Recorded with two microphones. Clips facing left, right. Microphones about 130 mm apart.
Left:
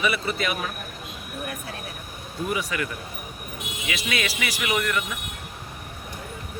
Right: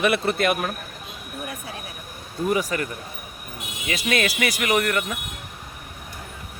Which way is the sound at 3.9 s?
45° right (ahead or behind).